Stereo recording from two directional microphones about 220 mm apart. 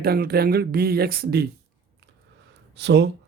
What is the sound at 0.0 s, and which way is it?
Speech, 45° right (ahead or behind).